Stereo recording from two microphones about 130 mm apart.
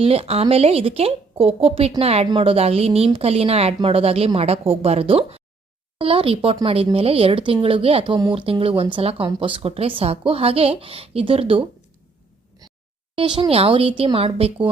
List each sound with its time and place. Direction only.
0.0 s speech: 50° right (ahead or behind)
13.1 s speech: 40° right (ahead or behind)